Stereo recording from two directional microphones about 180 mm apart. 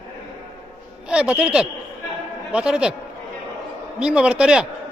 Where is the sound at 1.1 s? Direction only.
5° right (ahead or behind).